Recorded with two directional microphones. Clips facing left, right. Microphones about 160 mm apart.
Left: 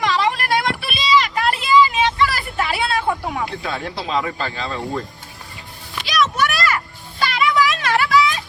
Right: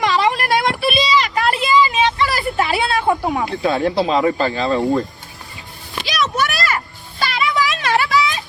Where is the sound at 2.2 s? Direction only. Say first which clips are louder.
Right 2 dB; 25° right (ahead or behind).